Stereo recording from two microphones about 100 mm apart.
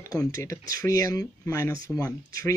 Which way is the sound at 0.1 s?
30° left (ahead or behind).